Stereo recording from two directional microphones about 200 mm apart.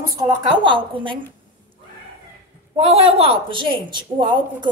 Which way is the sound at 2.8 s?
30° right (ahead or behind).